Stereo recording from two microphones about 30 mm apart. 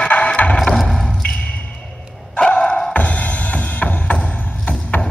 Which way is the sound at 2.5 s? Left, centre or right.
Left.